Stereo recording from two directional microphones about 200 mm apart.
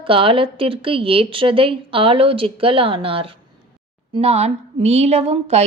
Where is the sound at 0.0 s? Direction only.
25° right (ahead or behind).